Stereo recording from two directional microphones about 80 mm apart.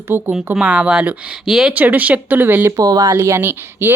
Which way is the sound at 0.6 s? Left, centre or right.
Centre.